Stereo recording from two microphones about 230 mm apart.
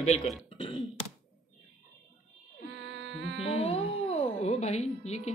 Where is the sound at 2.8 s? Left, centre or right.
Right.